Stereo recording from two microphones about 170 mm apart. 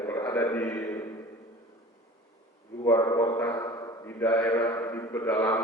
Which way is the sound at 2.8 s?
20° left (ahead or behind).